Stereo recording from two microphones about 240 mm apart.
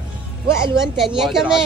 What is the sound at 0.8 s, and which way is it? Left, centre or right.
Speech, centre.